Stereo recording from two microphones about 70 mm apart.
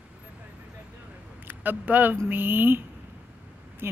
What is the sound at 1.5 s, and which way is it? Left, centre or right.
Speech, right.